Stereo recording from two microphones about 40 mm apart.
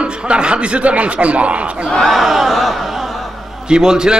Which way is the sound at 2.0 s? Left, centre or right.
Centre.